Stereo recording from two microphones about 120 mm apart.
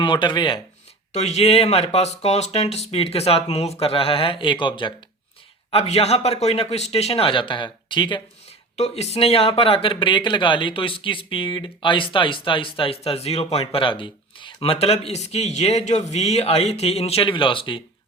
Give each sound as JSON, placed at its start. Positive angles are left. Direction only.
{"t": 0.0, "sound": "speech", "side_deg": 40}
{"t": 1.1, "sound": "speech", "side_deg": 65}
{"t": 5.7, "sound": "speech", "side_deg": 55}
{"t": 8.7, "sound": "speech", "side_deg": 60}